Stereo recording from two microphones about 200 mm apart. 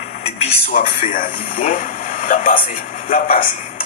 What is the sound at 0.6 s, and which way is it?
Speech, 45° left (ahead or behind).